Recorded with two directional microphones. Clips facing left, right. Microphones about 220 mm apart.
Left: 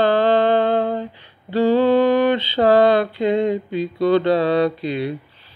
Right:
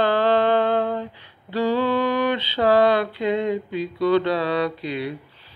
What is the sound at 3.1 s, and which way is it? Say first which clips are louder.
Mantra: left 4 dB; 25° left (ahead or behind).